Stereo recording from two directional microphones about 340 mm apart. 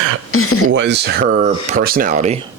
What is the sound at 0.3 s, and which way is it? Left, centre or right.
Speech, left.